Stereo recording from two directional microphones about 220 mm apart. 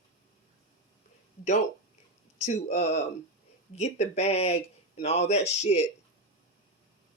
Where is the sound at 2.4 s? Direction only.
30° left (ahead or behind).